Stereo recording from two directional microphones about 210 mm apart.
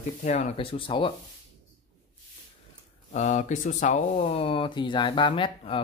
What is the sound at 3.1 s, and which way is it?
Speech, 35° left (ahead or behind).